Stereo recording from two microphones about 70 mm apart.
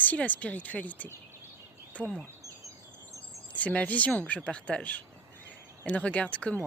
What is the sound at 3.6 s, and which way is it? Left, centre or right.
Speech, left.